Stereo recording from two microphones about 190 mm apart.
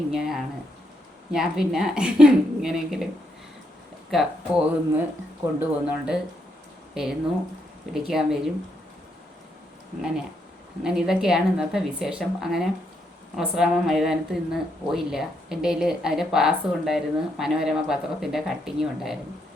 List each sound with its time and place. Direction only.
0.1 s a woman's voice: centre (ahead or behind)
4.1 s a woman's voice: 5° right (ahead or behind)
10.8 s a woman's voice: centre (ahead or behind)